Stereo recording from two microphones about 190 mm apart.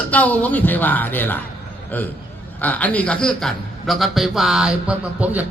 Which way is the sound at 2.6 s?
10° left (ahead or behind).